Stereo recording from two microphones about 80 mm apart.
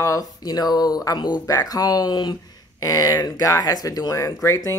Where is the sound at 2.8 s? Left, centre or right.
Left.